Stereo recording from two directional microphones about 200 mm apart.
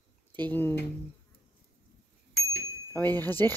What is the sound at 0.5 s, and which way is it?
Speech, 10° left (ahead or behind).